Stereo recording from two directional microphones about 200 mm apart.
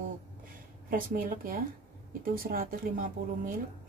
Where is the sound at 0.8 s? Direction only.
45° right (ahead or behind).